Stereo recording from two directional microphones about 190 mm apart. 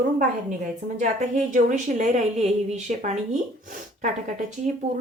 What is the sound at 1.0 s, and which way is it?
A woman's voice, 40° right (ahead or behind).